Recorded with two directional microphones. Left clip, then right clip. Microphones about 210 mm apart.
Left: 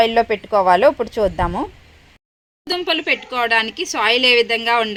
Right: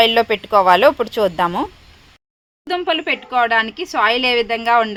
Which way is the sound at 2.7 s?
10° right (ahead or behind).